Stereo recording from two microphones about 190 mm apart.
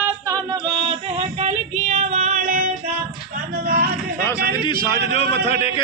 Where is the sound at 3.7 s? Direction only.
50° right (ahead or behind).